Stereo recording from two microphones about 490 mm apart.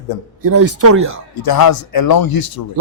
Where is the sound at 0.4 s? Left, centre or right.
Right.